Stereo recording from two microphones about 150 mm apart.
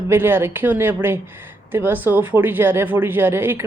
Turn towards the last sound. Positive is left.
turn(degrees=-15)  # may be behind; listen again after turning